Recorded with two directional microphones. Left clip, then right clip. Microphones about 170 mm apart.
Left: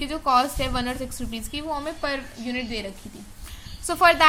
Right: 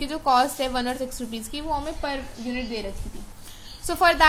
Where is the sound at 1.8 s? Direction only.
30° left (ahead or behind).